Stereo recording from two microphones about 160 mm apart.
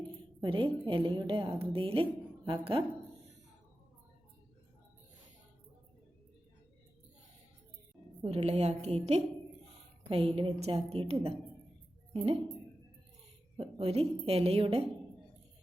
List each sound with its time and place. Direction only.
0.4 s a woman's voice: 30° right (ahead or behind)
8.2 s a woman's voice: 40° right (ahead or behind)
13.6 s a woman's voice: 35° right (ahead or behind)